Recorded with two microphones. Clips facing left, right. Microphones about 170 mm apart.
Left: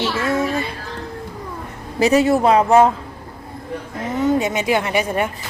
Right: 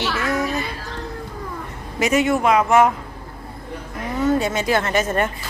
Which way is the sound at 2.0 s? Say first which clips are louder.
Left 4 dB; 35° left (ahead or behind).